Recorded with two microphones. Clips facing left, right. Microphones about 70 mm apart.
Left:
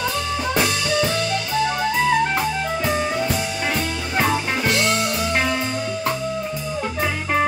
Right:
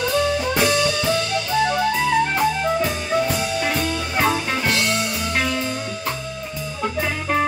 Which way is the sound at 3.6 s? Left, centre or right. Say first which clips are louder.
Right 1 dB; centre.